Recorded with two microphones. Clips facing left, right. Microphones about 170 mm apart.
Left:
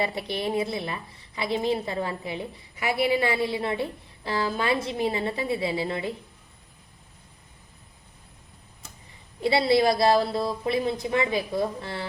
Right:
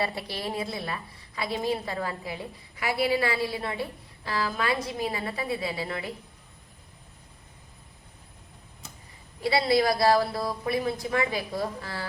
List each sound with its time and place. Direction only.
0.0 s a woman's voice: 20° left (ahead or behind)
9.4 s a woman's voice: 25° left (ahead or behind)